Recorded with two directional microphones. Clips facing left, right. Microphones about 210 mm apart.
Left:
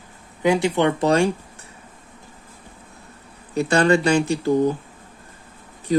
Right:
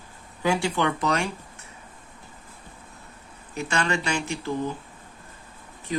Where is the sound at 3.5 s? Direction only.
35° left (ahead or behind).